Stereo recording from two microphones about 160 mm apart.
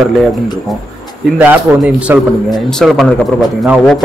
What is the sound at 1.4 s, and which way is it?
A man's voice, 10° right (ahead or behind).